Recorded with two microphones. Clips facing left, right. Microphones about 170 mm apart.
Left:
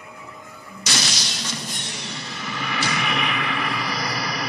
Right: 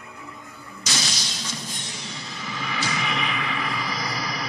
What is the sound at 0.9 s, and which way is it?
Music, 75° left (ahead or behind).